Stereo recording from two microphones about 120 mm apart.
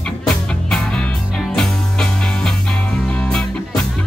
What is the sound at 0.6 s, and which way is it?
Music, 5° left (ahead or behind).